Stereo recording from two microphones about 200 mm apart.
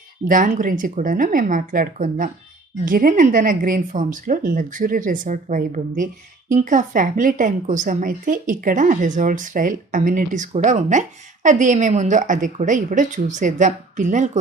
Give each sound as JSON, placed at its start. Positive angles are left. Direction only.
{"t": 0.3, "sound": "a woman's voice", "side_deg": -40}